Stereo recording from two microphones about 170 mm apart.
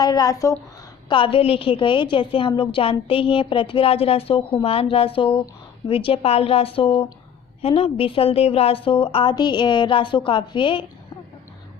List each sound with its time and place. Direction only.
0.0 s a woman's voice: 20° left (ahead or behind)
1.1 s a woman's voice: 30° left (ahead or behind)